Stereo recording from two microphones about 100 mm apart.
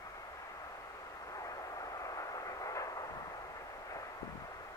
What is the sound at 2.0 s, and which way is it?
Vehicle, 35° left (ahead or behind).